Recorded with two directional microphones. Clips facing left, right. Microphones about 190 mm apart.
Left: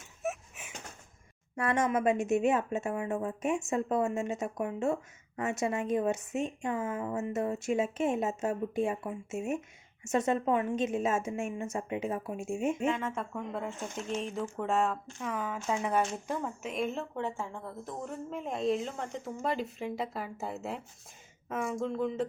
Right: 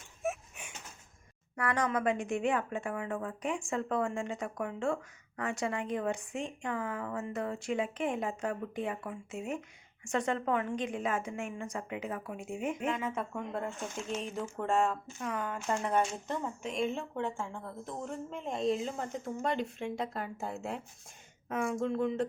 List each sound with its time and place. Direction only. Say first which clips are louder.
0.2 s a sound: even; centre (ahead or behind)
1.5 s speech: left 3 dB; 25° left (ahead or behind)
12.9 s speech: left 1 dB; centre (ahead or behind)